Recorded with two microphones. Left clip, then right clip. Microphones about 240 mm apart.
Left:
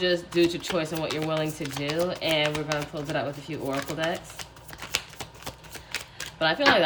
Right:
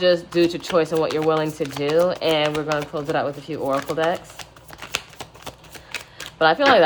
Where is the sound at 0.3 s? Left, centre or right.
Centre.